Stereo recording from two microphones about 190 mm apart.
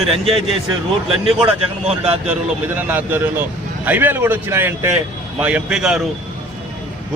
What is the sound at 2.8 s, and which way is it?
A man's voice, 10° right (ahead or behind).